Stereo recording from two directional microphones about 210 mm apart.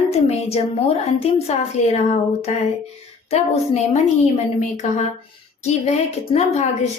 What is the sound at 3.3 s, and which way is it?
Speech, 30° left (ahead or behind).